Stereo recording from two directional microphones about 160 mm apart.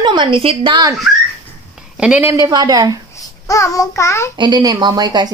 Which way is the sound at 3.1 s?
20° left (ahead or behind).